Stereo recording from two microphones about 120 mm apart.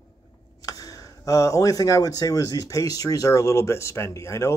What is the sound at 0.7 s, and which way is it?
Speech, 30° left (ahead or behind).